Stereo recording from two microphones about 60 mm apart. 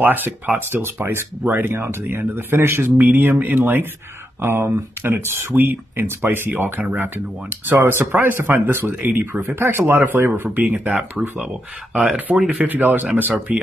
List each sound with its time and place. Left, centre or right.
0.0 s speech: right
12.5 s speech: right